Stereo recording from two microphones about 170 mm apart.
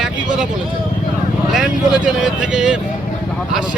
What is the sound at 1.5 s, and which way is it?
Speech, 5° right (ahead or behind).